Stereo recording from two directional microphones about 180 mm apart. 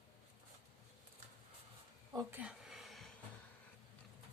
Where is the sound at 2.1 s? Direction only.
10° right (ahead or behind).